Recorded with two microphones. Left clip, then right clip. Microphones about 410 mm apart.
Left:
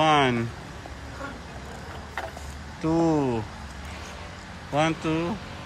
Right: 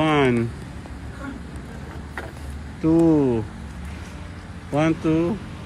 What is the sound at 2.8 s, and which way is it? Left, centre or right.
Speech, centre.